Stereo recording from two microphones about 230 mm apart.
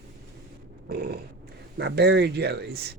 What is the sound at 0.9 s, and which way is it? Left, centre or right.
Speech, right.